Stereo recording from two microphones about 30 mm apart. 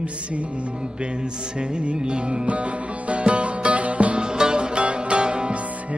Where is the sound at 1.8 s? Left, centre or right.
Right.